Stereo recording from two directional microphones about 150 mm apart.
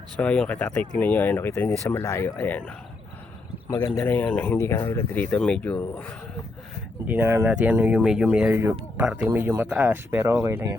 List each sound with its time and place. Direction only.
0.2 s speech: 10° left (ahead or behind)
3.8 s speech: 20° left (ahead or behind)
7.1 s speech: 15° right (ahead or behind)